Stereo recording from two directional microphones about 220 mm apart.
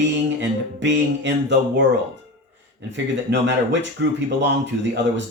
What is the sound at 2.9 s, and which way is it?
Speech, 55° right (ahead or behind).